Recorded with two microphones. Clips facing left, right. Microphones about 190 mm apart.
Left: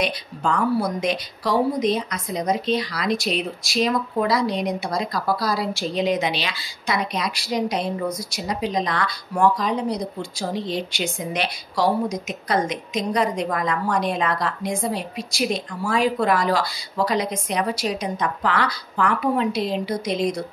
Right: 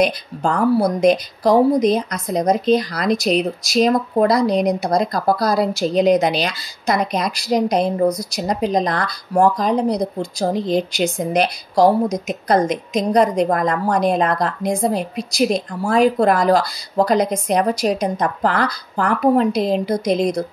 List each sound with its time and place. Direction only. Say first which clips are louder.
0.0 s a woman's voice: right 6 dB; 45° right (ahead or behind)